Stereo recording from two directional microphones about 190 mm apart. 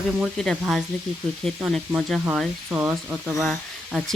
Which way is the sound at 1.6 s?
5° right (ahead or behind).